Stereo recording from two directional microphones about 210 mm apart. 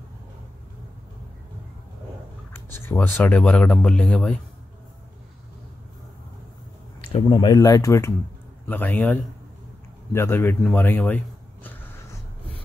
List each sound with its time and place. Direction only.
2.5 s speech: 10° left (ahead or behind)
7.1 s speech: 25° left (ahead or behind)